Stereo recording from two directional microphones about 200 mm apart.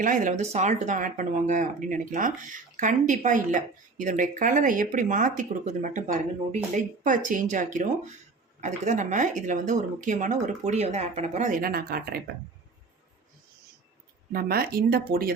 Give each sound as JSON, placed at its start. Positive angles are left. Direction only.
{"t": 0.0, "sound": "speech", "side_deg": -40}
{"t": 14.3, "sound": "speech", "side_deg": -50}